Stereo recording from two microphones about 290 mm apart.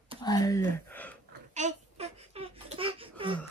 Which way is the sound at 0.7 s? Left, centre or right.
Centre.